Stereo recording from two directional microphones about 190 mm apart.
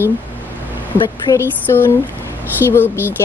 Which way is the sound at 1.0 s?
20° left (ahead or behind).